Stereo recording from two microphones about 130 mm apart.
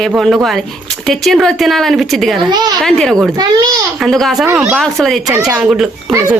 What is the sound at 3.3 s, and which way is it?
Speech, 30° right (ahead or behind).